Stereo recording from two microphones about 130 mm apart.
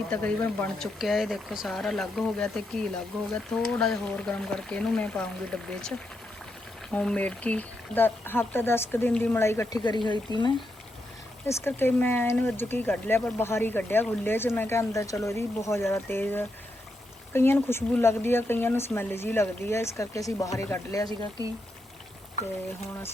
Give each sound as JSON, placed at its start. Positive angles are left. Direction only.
{"t": 0.1, "sound": "speech", "side_deg": 10}
{"t": 0.9, "sound": "speech", "side_deg": 0}
{"t": 6.9, "sound": "speech", "side_deg": 10}
{"t": 10.3, "sound": "speech", "side_deg": -35}
{"t": 11.4, "sound": "speech", "side_deg": 15}
{"t": 21.1, "sound": "speech", "side_deg": -30}